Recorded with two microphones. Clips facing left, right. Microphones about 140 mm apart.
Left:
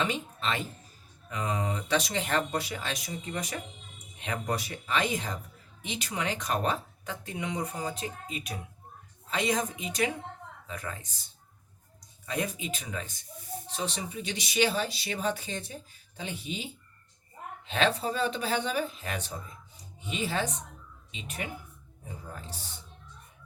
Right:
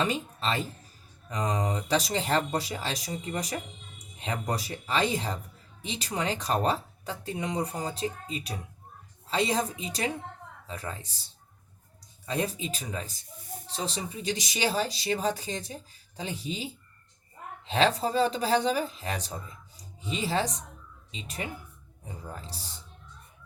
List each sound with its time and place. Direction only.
0.0 s speech: 35° right (ahead or behind)
17.7 s speech: 35° right (ahead or behind)